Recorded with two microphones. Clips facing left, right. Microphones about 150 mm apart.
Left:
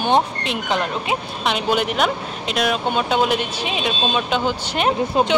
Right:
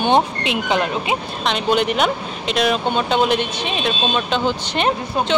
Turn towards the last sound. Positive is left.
turn(degrees=10)  # may be behind; listen again after turning